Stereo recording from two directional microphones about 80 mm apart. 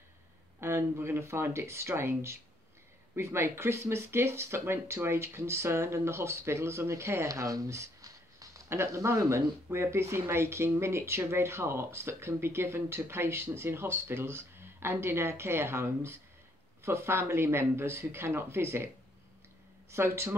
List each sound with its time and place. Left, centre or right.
0.6 s speech: right
19.9 s speech: right